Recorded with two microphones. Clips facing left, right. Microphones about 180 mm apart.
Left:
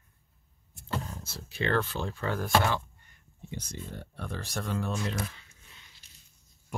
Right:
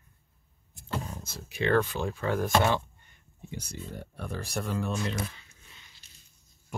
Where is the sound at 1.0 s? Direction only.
15° right (ahead or behind).